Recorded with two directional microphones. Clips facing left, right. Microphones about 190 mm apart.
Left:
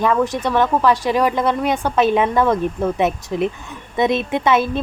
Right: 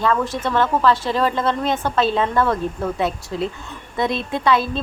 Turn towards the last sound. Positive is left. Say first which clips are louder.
# left 2 dB
turn(degrees=20)  # may be behind; listen again after turning